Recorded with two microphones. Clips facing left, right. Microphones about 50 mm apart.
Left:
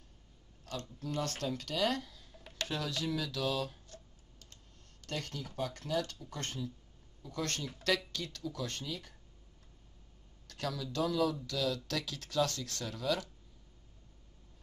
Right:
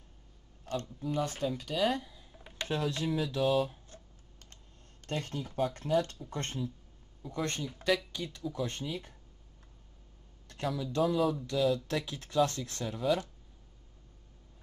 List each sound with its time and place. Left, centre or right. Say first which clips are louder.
0.9 s speech: right 2 dB; centre
5.0 s speech: right 4 dB; right
10.4 s speech: right 4 dB; right